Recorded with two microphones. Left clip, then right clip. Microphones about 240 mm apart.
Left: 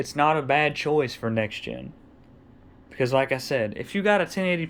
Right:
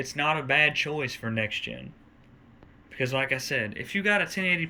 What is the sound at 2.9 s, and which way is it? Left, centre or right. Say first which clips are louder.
Speech: left 5 dB; centre.